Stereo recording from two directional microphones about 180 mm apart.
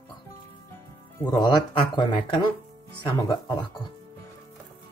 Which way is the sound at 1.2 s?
25° left (ahead or behind).